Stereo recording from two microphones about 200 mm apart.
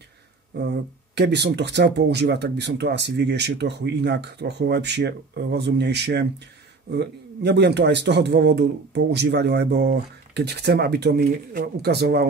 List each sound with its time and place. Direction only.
0.7 s speech: 60° right (ahead or behind)